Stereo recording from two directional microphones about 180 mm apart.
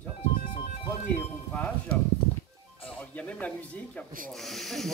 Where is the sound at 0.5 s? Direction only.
40° left (ahead or behind).